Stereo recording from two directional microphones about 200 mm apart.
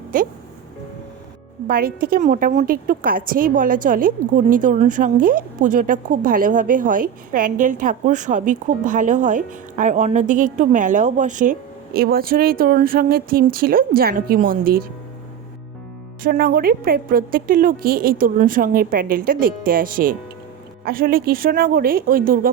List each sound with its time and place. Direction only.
0.1 s a woman's voice: 45° right (ahead or behind)
1.6 s a woman's voice: 45° right (ahead or behind)
16.2 s a woman's voice: 45° right (ahead or behind)